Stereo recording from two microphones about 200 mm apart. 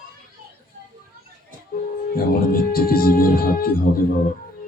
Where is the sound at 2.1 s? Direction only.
45° left (ahead or behind).